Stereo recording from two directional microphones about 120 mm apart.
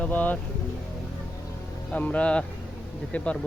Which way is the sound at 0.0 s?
15° left (ahead or behind).